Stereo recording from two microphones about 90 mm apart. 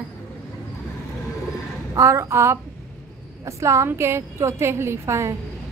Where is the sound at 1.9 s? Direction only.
35° right (ahead or behind).